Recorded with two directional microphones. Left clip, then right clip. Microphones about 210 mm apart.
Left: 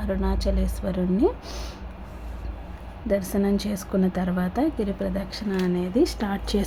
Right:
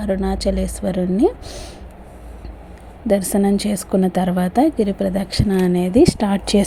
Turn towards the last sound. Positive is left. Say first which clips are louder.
# right 9 dB
turn(degrees=-25)  # may be behind; listen again after turning